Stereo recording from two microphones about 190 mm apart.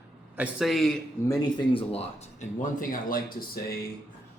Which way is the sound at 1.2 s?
20° left (ahead or behind).